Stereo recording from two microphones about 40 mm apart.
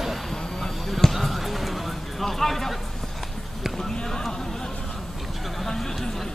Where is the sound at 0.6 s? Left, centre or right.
Centre.